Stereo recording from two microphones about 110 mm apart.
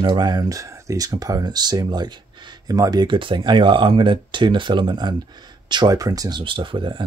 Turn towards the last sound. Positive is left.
turn(degrees=-50)  # may be behind; listen again after turning